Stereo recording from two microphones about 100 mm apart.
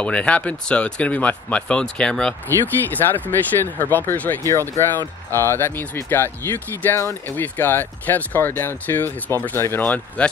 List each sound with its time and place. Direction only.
0.0 s speech: 10° left (ahead or behind)